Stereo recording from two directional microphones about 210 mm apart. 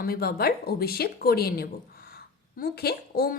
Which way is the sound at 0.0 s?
45° left (ahead or behind).